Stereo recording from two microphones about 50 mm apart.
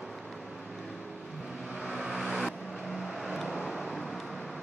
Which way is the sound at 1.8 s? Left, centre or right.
Centre.